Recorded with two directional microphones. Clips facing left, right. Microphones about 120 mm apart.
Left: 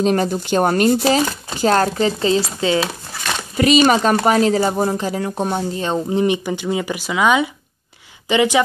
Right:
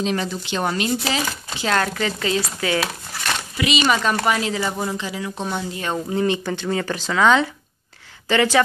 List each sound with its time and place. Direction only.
0.0 s speech: 45° left (ahead or behind); by 3.3 s 25° left (ahead or behind)
3.5 s speech: 45° left (ahead or behind)
5.9 s speech: 20° left (ahead or behind)